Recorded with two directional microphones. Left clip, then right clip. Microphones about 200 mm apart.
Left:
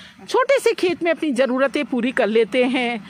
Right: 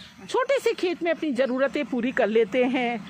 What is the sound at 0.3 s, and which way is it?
Speech, 45° left (ahead or behind).